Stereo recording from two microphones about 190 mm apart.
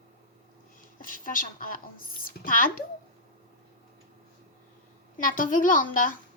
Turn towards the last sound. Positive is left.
turn(degrees=45)  # may be behind; listen again after turning